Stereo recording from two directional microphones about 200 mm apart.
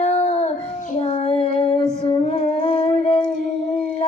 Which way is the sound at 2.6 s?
30° left (ahead or behind).